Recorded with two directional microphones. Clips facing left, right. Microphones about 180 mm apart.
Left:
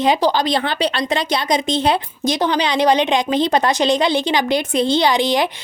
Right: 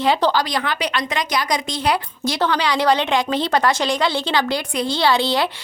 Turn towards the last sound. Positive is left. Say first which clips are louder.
# left 2 dB
turn(degrees=15)  # may be behind; listen again after turning